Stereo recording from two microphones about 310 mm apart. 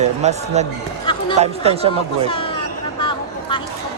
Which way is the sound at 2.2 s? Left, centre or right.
Centre.